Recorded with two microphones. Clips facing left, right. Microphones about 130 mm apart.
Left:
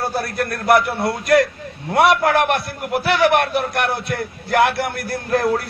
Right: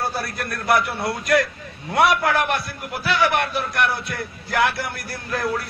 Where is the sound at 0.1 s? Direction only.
50° left (ahead or behind).